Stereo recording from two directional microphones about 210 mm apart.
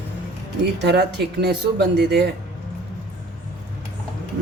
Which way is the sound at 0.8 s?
50° right (ahead or behind).